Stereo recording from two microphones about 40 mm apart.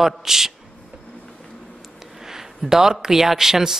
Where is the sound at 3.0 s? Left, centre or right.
Centre.